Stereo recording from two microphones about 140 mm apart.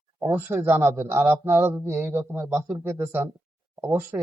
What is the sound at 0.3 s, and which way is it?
Speech, 15° right (ahead or behind).